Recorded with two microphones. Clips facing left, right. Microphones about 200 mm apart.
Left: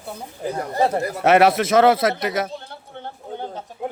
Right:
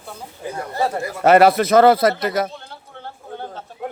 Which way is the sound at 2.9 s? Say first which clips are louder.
Left 2 dB; 20° left (ahead or behind).